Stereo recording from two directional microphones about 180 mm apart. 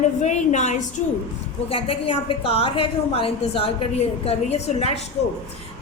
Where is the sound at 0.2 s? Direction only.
40° left (ahead or behind).